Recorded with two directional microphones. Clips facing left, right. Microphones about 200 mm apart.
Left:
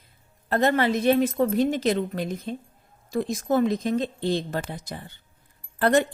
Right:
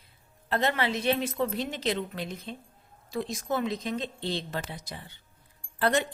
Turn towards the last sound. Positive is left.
turn(degrees=50)  # may be behind; listen again after turning